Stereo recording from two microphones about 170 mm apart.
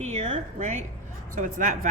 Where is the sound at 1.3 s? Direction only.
50° right (ahead or behind).